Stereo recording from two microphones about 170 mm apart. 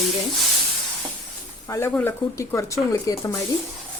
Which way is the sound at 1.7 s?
15° left (ahead or behind).